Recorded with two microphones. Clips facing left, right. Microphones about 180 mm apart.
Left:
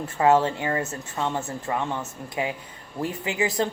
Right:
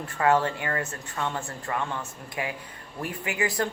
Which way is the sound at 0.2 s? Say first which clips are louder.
Left 3 dB; 25° left (ahead or behind).